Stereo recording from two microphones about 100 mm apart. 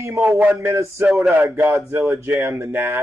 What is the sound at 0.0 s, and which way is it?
Speech, 20° right (ahead or behind).